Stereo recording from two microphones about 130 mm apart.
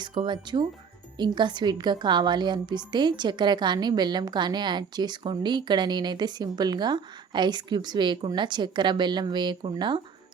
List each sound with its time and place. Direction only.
0.2 s a woman's voice: 35° right (ahead or behind)